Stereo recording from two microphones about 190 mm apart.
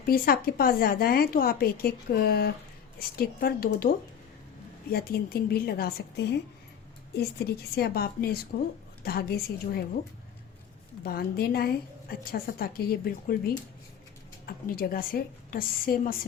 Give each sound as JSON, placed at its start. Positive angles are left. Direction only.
{"t": 0.0, "sound": "a woman's voice", "side_deg": 50}
{"t": 11.0, "sound": "a woman's voice", "side_deg": 55}